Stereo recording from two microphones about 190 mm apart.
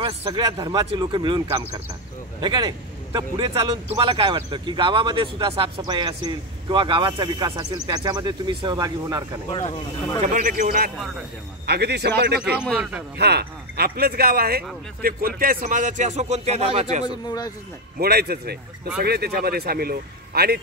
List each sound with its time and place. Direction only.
0.0 s a man's voice: 25° right (ahead or behind)
9.5 s speech: 30° left (ahead or behind)
10.2 s speech: 40° right (ahead or behind)
11.6 s a man's voice: 60° right (ahead or behind)
12.4 s a man's voice: 5° right (ahead or behind)
13.2 s speech: 60° right (ahead or behind); by 16.8 s 35° right (ahead or behind)
17.0 s speech: 20° left (ahead or behind)
17.9 s a man's voice: 55° right (ahead or behind)